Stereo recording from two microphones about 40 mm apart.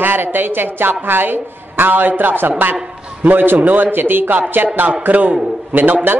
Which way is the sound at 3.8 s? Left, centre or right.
Right.